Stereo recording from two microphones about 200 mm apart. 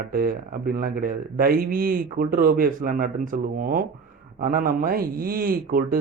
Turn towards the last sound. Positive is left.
turn(degrees=-45)  # may be behind; listen again after turning